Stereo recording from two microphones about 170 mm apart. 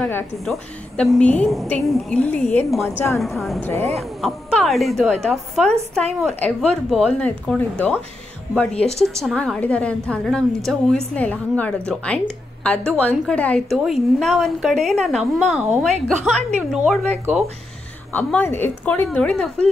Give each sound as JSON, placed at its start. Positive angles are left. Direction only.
{"t": 0.0, "sound": "a woman's voice", "side_deg": 5}
{"t": 3.6, "sound": "speech", "side_deg": 15}
{"t": 3.9, "sound": "a woman's voice", "side_deg": 0}
{"t": 18.1, "sound": "a woman's voice", "side_deg": 10}